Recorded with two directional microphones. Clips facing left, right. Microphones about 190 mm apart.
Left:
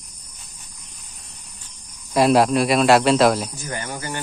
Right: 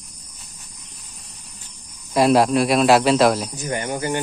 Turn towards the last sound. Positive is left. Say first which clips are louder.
# right 6 dB
turn(degrees=-20)  # may be behind; listen again after turning